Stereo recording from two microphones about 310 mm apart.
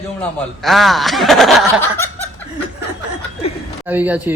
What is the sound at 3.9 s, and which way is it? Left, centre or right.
Snicker, centre.